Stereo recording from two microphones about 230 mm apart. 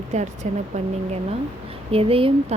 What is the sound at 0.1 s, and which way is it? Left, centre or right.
Speech, right.